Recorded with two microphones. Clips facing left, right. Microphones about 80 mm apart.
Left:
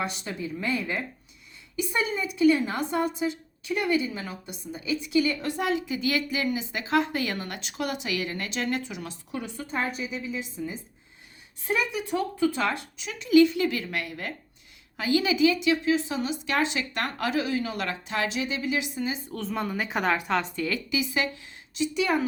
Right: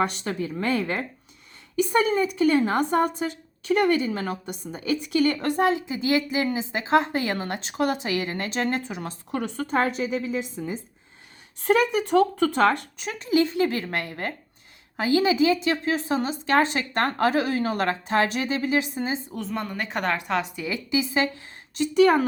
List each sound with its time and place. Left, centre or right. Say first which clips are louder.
0.0 s a woman's voice: right 6 dB; right
5.6 s a woman's voice: right 2 dB; right
9.4 s a woman's voice: right 7 dB; right
19.3 s a woman's voice: even; centre
20.7 s a woman's voice: right 3 dB; right
21.8 s a woman's voice: right 7 dB; right